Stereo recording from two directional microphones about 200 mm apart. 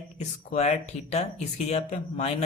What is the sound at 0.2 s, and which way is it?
Speech, 35° left (ahead or behind).